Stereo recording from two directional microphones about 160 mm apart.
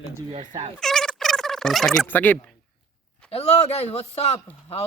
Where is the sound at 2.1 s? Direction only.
10° left (ahead or behind).